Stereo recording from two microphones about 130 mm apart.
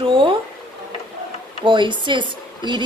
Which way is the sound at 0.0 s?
40° right (ahead or behind).